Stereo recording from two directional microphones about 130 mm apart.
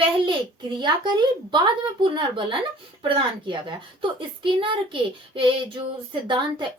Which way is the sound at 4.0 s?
40° right (ahead or behind).